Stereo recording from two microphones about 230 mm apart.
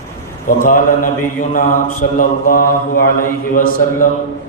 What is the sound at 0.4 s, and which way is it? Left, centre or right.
Mantra, left.